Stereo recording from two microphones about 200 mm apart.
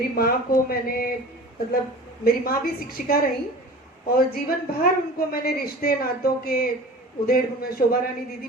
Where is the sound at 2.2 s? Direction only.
45° left (ahead or behind).